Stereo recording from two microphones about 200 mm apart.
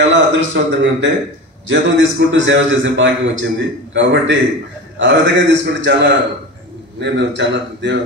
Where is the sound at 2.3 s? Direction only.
70° right (ahead or behind).